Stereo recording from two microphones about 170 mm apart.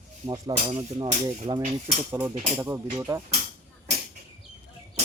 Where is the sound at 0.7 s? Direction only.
40° right (ahead or behind).